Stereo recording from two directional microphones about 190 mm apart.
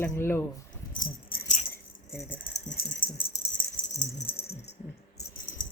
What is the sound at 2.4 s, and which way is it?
Speech, 65° left (ahead or behind).